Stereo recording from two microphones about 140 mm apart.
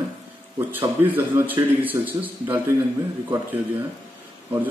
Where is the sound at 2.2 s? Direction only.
25° right (ahead or behind).